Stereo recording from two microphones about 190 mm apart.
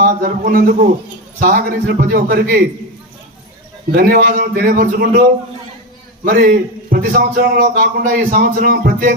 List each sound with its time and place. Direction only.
0.0 s a man's voice: 45° right (ahead or behind)
3.9 s a man's voice: 55° right (ahead or behind)
6.2 s a man's voice: 50° right (ahead or behind)